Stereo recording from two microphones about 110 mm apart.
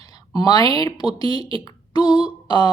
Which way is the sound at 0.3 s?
35° left (ahead or behind).